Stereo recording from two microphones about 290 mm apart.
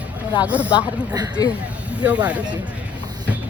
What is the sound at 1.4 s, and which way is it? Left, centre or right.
Speech, centre.